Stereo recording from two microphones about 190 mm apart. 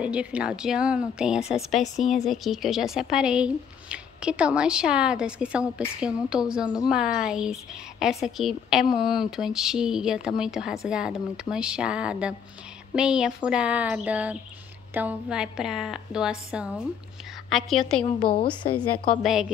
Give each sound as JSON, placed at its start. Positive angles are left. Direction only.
{"t": 0.0, "sound": "speech", "side_deg": -5}
{"t": 18.3, "sound": "a woman's voice", "side_deg": 25}
{"t": 18.8, "sound": "speech", "side_deg": 0}